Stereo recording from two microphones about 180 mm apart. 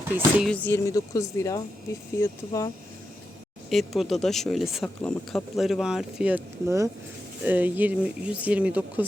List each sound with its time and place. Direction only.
0.1 s speech: 10° right (ahead or behind)
0.4 s speech: 10° left (ahead or behind)
3.7 s speech: centre (ahead or behind)